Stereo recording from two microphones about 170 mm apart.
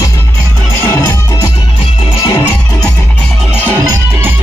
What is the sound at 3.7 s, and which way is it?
Music, 10° right (ahead or behind).